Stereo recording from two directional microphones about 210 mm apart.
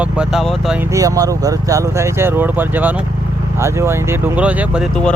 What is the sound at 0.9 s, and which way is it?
Speech, 15° right (ahead or behind).